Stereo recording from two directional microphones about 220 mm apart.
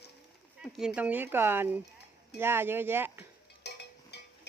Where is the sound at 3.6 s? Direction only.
50° left (ahead or behind).